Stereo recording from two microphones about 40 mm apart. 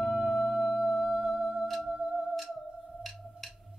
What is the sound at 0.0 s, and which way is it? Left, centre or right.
Music, centre.